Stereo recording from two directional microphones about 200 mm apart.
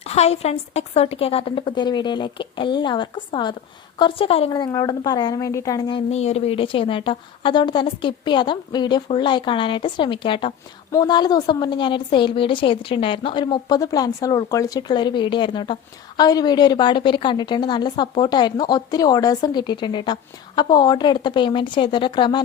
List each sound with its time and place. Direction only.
0.0 s a woman's voice: 30° left (ahead or behind)
6.1 s a woman's voice: 30° left (ahead or behind)